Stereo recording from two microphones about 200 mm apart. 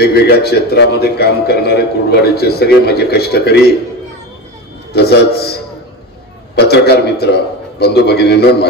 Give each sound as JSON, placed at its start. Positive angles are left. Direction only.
{"t": 0.0, "sound": "a man's voice", "side_deg": 55}
{"t": 4.9, "sound": "a man's voice", "side_deg": 55}